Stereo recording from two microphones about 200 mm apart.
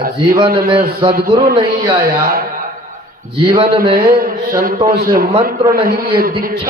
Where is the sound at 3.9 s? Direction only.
45° right (ahead or behind).